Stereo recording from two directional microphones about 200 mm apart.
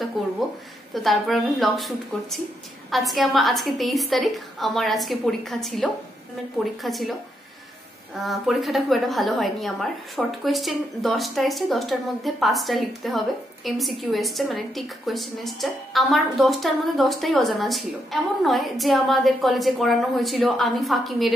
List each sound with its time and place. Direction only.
0.2 s a woman's voice: centre (ahead or behind)
8.2 s a woman's voice: centre (ahead or behind)